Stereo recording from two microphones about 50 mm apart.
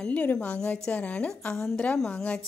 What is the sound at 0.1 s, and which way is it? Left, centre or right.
A woman's voice, left.